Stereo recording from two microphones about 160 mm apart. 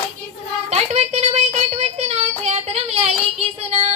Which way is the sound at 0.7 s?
40° right (ahead or behind).